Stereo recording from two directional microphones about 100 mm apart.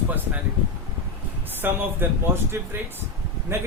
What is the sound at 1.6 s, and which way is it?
Speech, 20° right (ahead or behind).